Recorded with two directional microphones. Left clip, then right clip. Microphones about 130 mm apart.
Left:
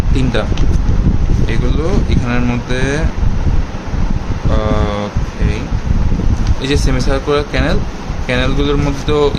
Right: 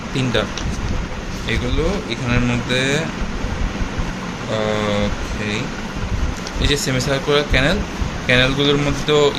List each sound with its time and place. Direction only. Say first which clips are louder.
2.0 s speech: left 2 dB; 25° left (ahead or behind)
4.6 s speech: left 1 dB; 15° left (ahead or behind)
6.6 s speech: left 2 dB; 25° left (ahead or behind)